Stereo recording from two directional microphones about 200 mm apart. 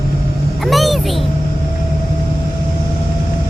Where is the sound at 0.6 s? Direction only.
Centre (ahead or behind).